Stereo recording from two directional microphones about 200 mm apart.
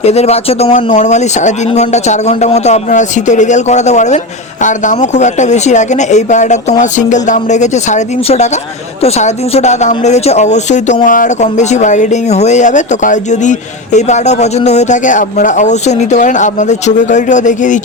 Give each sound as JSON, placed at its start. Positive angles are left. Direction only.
{"t": 0.0, "sound": "speech", "side_deg": 30}